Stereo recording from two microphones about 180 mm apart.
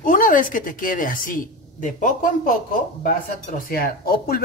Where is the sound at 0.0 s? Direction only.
50° left (ahead or behind).